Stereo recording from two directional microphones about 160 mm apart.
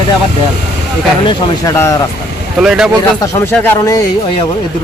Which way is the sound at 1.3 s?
20° left (ahead or behind).